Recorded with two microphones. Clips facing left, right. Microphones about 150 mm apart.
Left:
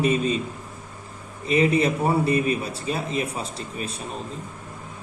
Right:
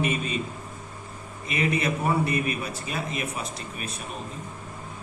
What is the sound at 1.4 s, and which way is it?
A man's voice, 30° left (ahead or behind).